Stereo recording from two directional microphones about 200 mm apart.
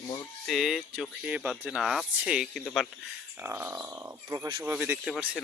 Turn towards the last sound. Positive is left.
turn(degrees=-5)  # may be behind; listen again after turning